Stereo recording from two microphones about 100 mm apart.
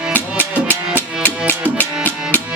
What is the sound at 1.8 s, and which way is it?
Music, 20° left (ahead or behind).